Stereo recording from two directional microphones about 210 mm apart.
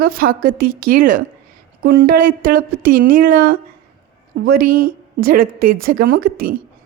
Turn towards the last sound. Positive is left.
turn(degrees=-45)  # may be behind; listen again after turning